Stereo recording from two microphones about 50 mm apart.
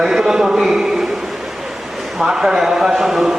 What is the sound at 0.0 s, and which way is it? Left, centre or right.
Speech, centre.